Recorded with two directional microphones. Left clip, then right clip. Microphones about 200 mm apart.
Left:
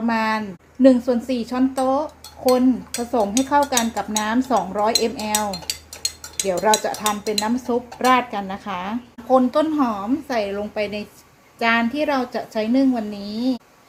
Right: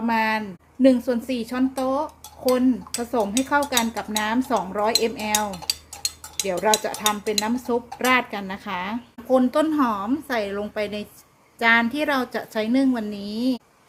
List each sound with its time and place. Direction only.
0.0 s a woman's voice: 10° right (ahead or behind)